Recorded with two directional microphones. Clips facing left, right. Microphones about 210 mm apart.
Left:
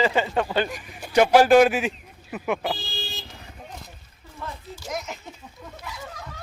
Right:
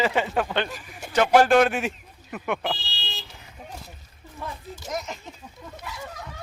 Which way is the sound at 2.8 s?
50° left (ahead or behind).